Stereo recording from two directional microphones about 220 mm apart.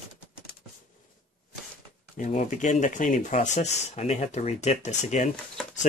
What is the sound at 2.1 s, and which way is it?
Speech, 35° left (ahead or behind).